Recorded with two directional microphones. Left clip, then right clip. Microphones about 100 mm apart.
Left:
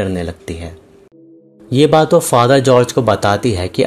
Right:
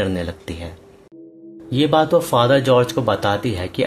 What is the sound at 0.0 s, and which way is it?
Speech, 35° left (ahead or behind).